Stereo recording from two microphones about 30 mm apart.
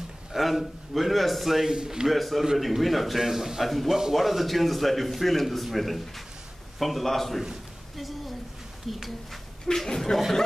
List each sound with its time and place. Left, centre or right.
0.4 s a man's voice: centre
1.7 s speech: right
2.0 s a man's voice: centre
8.9 s a man's voice: centre
9.8 s speech: centre